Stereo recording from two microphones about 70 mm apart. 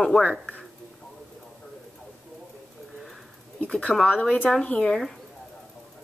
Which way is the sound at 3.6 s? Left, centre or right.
Left.